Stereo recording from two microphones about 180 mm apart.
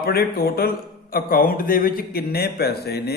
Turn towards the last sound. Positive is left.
turn(degrees=60)  # may be behind; listen again after turning